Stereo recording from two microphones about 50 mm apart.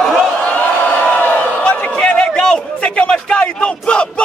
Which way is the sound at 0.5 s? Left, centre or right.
Left.